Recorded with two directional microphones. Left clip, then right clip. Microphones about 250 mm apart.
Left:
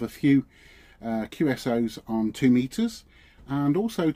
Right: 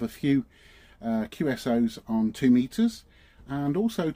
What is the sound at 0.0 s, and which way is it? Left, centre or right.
Speech, centre.